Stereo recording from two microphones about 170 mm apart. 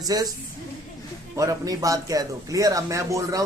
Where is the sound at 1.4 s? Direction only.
20° right (ahead or behind).